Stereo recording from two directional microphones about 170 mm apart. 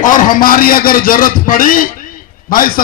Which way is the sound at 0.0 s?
50° left (ahead or behind).